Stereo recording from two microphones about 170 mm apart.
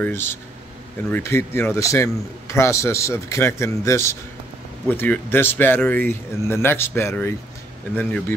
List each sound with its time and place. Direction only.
0.0 s speech: 15° left (ahead or behind)